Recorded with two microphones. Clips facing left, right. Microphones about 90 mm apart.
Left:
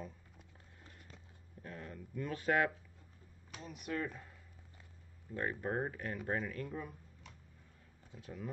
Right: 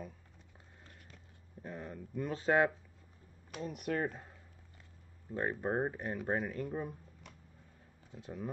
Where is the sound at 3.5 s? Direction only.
50° right (ahead or behind).